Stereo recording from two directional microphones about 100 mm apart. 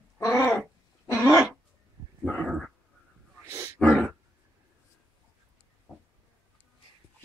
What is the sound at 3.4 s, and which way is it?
Wild animals, 25° right (ahead or behind).